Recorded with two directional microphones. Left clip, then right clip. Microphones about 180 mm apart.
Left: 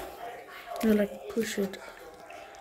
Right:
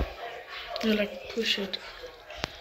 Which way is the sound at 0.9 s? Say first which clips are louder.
Left 2 dB; 40° left (ahead or behind).